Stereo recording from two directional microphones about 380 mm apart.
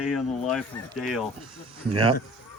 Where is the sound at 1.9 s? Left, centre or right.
Centre.